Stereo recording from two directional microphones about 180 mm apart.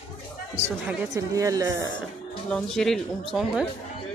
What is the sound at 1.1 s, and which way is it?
Speech, 20° right (ahead or behind).